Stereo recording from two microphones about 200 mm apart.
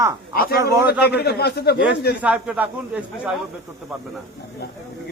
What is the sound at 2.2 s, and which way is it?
Speech, 5° right (ahead or behind).